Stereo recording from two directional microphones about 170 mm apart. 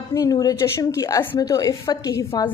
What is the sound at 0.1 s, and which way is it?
A woman's voice, 20° left (ahead or behind).